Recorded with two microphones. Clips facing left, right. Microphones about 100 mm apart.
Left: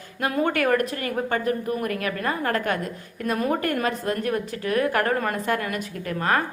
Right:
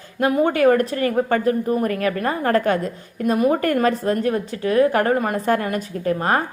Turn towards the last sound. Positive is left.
turn(degrees=-30)  # may be behind; listen again after turning